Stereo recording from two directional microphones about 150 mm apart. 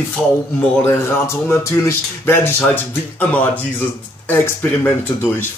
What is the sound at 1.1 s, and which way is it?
Speech, 15° left (ahead or behind).